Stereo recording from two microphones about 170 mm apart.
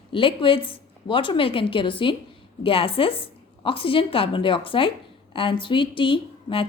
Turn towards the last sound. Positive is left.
turn(degrees=30)  # may be behind; listen again after turning